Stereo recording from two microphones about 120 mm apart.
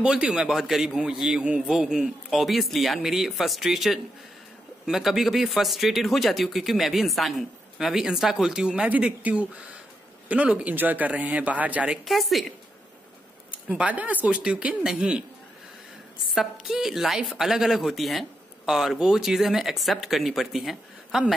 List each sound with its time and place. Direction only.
0.0 s speech: 5° right (ahead or behind)
13.5 s speech: 10° right (ahead or behind)
16.3 s speech: 5° right (ahead or behind)